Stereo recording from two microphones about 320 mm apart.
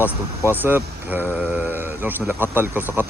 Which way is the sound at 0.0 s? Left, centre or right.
Centre.